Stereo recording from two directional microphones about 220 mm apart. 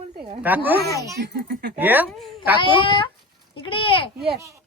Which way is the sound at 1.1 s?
50° right (ahead or behind).